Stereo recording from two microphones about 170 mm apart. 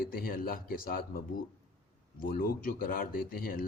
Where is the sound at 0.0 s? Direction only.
60° left (ahead or behind).